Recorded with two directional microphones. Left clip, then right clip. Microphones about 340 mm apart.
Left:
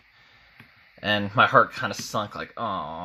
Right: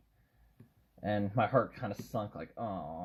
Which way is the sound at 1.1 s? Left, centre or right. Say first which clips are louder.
Left 12 dB; left.